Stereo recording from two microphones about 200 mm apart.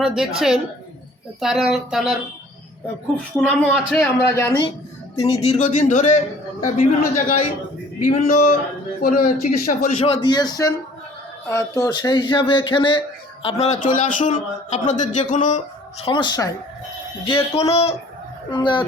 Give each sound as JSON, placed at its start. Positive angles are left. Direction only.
{"t": 0.0, "sound": "a man's voice", "side_deg": -5}
{"t": 3.3, "sound": "a man's voice", "side_deg": 0}
{"t": 4.2, "sound": "speech", "side_deg": 15}
{"t": 5.1, "sound": "a man's voice", "side_deg": 30}
{"t": 10.2, "sound": "speech", "side_deg": 20}